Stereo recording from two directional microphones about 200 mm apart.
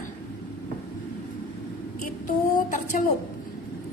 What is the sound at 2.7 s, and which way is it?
Speech, 40° left (ahead or behind).